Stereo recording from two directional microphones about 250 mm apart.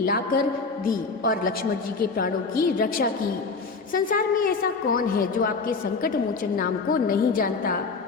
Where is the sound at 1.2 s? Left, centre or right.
Left.